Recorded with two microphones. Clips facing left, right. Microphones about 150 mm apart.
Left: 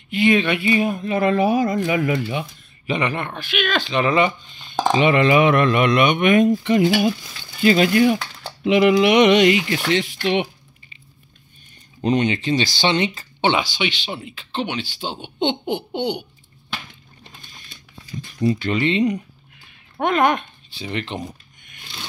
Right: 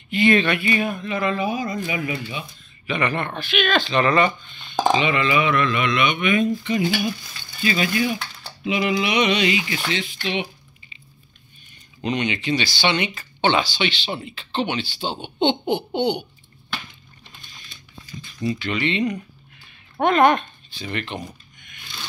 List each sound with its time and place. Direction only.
0.1 s speech: 5° left (ahead or behind)
0.6 s speech: 20° left (ahead or behind)
0.9 s speech: 40° left (ahead or behind)
1.4 s speech: 65° left (ahead or behind)
1.7 s speech: 50° left (ahead or behind)
3.0 s speech: 10° left (ahead or behind)
4.9 s speech: 50° left (ahead or behind)
6.4 s speech: 65° left (ahead or behind)
12.0 s speech: 35° left (ahead or behind)
13.4 s speech: 20° left (ahead or behind)
13.7 s speech: 10° left (ahead or behind)
18.4 s speech: 40° left (ahead or behind)
20.0 s speech: 5° left (ahead or behind)
20.8 s speech: 25° left (ahead or behind)